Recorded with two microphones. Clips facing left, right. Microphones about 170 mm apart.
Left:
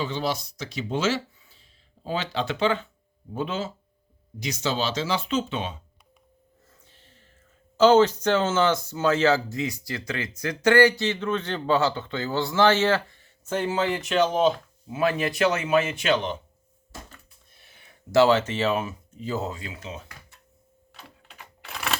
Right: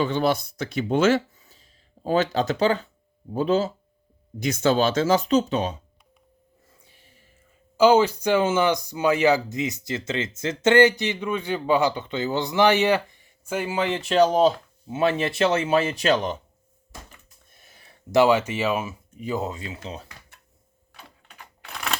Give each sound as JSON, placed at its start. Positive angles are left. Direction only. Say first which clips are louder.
{"t": 0.0, "sound": "speech", "louder": "right 6 dB", "side_deg": -55}
{"t": 4.4, "sound": "speech", "louder": "right 7 dB", "side_deg": -55}
{"t": 6.7, "sound": "a sound", "louder": "even", "side_deg": -10}
{"t": 7.8, "sound": "speech", "louder": "even", "side_deg": -10}
{"t": 14.0, "sound": "speech", "louder": "right 5 dB", "side_deg": -35}
{"t": 17.5, "sound": "a sound", "louder": "right 2 dB", "side_deg": -45}
{"t": 18.1, "sound": "speech", "louder": "right 1 dB", "side_deg": -15}
{"t": 21.2, "sound": "typewriter", "louder": "even", "side_deg": 5}